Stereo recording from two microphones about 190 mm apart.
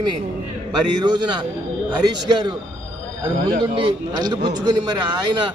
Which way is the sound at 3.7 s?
25° right (ahead or behind).